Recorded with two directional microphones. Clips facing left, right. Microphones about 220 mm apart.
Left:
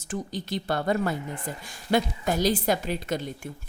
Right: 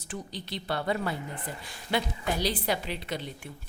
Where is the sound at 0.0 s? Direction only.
45° left (ahead or behind).